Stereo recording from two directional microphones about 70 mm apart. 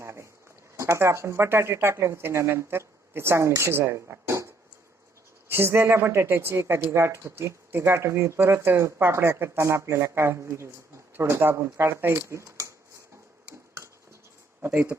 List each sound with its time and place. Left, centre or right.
0.0 s a sound: right
0.8 s speech: right
14.6 s speech: right